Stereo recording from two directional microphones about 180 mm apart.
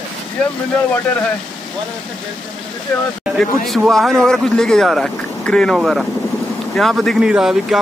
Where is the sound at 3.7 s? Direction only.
Centre (ahead or behind).